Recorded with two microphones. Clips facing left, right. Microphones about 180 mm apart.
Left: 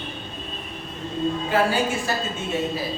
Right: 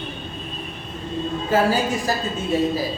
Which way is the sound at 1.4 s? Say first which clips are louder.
Right 4 dB; 40° right (ahead or behind).